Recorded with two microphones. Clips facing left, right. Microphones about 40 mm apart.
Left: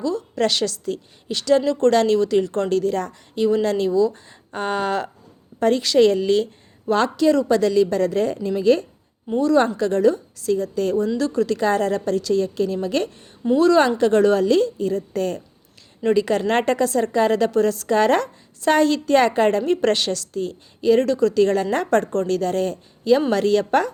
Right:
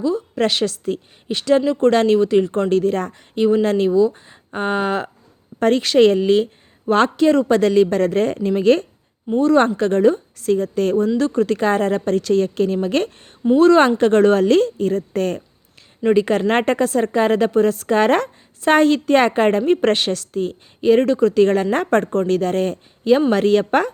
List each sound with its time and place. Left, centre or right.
0.0 s a woman's voice: right
5.5 s a woman's voice: right
6.9 s a woman's voice: right
9.4 s a woman's voice: right
16.0 s a woman's voice: right